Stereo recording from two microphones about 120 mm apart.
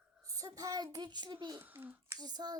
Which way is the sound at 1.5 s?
15° right (ahead or behind).